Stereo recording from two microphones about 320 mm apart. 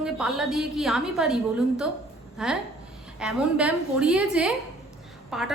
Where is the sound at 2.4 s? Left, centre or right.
Centre.